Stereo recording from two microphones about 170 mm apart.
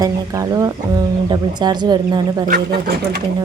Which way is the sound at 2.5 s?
65° right (ahead or behind).